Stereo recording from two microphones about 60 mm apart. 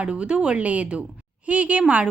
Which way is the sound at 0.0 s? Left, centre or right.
Centre.